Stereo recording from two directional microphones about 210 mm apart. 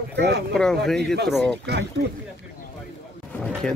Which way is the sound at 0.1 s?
55° right (ahead or behind).